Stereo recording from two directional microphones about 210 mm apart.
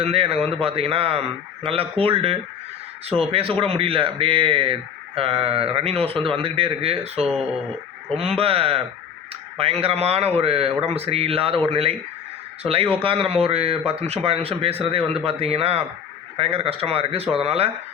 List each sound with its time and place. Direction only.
0.0 s speech: 30° right (ahead or behind)